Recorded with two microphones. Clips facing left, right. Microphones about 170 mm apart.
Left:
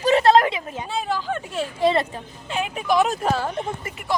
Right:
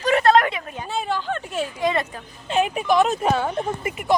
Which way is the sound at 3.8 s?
20° right (ahead or behind).